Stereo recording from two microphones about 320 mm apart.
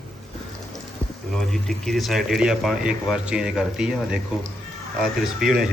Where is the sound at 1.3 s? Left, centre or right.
Centre.